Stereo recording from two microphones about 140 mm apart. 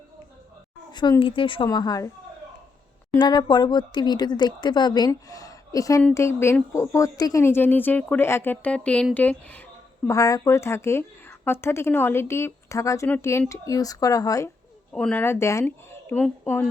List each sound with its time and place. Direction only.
0.9 s speech: 30° left (ahead or behind)
1.6 s speech: 30° left (ahead or behind)
3.2 s a woman's voice: 30° left (ahead or behind); by 9.6 s 10° left (ahead or behind)
10.1 s a woman's voice: 25° left (ahead or behind)
14.9 s a woman's voice: 10° left (ahead or behind)